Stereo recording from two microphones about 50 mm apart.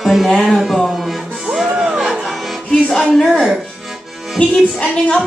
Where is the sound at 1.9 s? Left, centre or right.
Centre.